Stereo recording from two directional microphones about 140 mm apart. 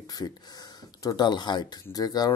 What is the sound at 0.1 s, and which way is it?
Speech, 25° left (ahead or behind).